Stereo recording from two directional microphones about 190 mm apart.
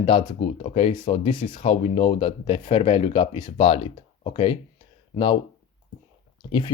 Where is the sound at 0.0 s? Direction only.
25° left (ahead or behind).